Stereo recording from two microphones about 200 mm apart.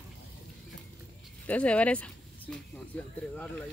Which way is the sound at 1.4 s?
5° left (ahead or behind).